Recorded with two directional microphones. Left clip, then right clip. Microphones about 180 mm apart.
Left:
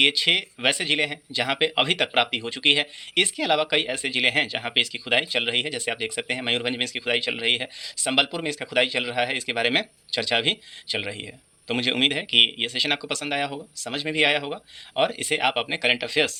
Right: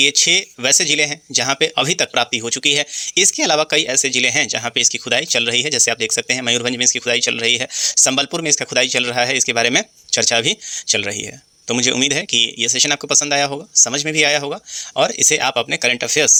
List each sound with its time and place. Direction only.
0.0 s speech: 35° right (ahead or behind)